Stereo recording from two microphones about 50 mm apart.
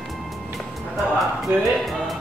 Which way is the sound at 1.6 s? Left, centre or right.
Centre.